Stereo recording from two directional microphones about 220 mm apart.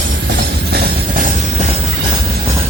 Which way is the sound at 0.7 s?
45° right (ahead or behind).